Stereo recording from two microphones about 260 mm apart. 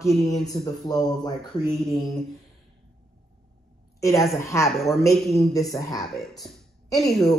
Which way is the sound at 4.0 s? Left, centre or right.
Centre.